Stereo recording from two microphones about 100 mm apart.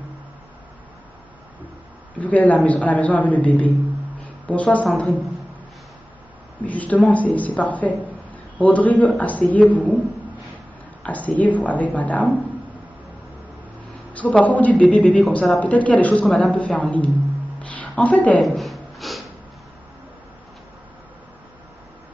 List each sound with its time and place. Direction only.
2.1 s a woman's voice: 15° left (ahead or behind)
6.6 s a woman's voice: 15° left (ahead or behind)
11.0 s a woman's voice: 15° left (ahead or behind)
14.1 s a woman's voice: 15° left (ahead or behind)
17.6 s a sound: 15° left (ahead or behind)
18.4 s snort: centre (ahead or behind)